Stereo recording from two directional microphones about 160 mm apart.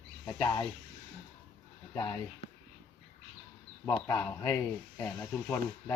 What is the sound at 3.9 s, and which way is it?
Speech, 20° left (ahead or behind).